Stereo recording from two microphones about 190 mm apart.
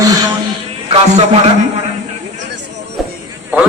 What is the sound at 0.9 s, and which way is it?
Speech, 35° right (ahead or behind).